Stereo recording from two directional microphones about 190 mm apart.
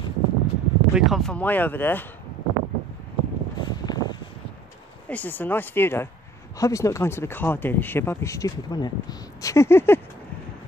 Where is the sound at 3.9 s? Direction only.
20° left (ahead or behind).